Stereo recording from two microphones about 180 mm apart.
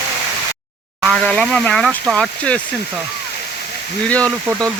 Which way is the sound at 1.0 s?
5° left (ahead or behind).